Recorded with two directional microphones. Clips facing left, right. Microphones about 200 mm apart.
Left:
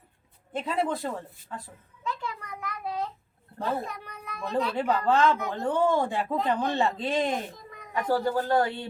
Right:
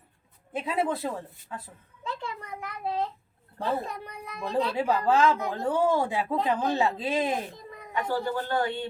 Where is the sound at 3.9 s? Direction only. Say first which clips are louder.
Right 2 dB; 30° right (ahead or behind).